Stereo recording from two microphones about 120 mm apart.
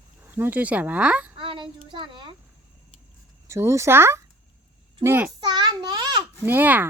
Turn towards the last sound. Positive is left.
turn(degrees=-15)  # may be behind; listen again after turning